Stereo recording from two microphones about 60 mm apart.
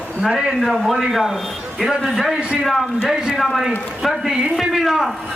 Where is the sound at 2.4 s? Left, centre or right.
Centre.